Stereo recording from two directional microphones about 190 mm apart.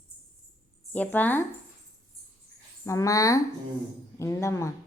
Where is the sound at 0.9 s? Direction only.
10° left (ahead or behind).